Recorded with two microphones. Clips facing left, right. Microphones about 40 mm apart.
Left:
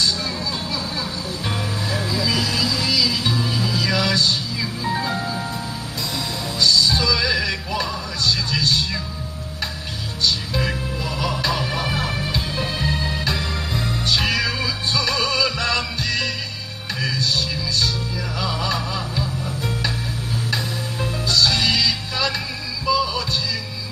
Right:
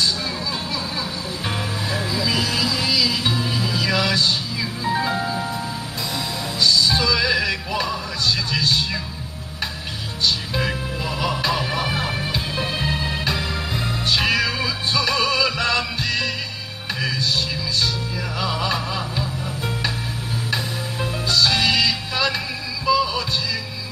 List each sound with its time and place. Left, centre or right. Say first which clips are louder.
1.5 s music: even; centre
10.7 s music: even; centre
18.4 s music: right 1 dB; centre
20.5 s music: right 2 dB; centre